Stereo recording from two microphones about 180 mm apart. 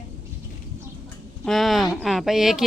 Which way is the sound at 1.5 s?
Centre (ahead or behind).